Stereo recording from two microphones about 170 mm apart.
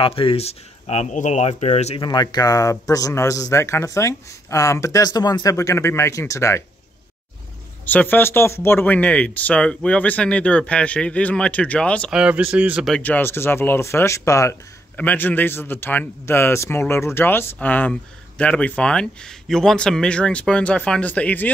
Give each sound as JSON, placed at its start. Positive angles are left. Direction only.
{"t": 0.0, "sound": "speech", "side_deg": 30}
{"t": 2.0, "sound": "speech", "side_deg": 25}
{"t": 7.8, "sound": "speech", "side_deg": 10}
{"t": 12.2, "sound": "speech", "side_deg": -5}
{"t": 12.9, "sound": "speech", "side_deg": 10}